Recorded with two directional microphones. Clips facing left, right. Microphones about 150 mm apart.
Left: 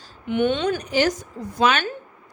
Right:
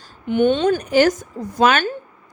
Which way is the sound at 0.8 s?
50° right (ahead or behind).